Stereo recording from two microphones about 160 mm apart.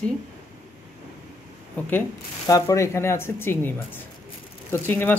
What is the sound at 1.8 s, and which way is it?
Speech, 10° left (ahead or behind).